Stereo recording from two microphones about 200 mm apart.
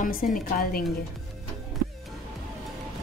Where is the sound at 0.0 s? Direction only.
45° left (ahead or behind).